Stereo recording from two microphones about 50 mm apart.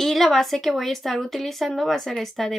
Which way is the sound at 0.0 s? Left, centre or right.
Centre.